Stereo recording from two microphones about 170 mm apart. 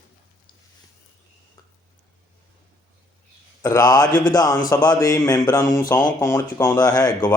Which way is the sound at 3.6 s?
20° left (ahead or behind).